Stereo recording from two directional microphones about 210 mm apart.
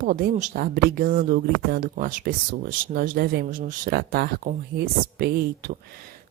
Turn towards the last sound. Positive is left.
turn(degrees=-45)  # may be behind; listen again after turning